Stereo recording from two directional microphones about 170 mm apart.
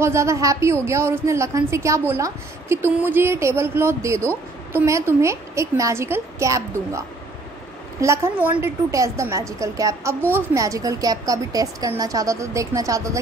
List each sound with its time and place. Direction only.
0.0 s a woman's voice: 15° right (ahead or behind)